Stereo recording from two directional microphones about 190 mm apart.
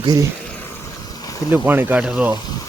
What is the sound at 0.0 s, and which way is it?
Speech, 20° right (ahead or behind).